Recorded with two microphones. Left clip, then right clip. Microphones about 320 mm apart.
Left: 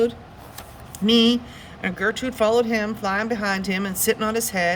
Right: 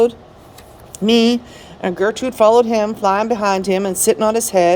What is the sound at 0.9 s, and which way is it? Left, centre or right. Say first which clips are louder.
A woman's voice: right 4 dB; centre.